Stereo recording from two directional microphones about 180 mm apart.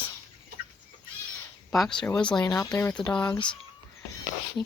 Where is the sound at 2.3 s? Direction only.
20° left (ahead or behind).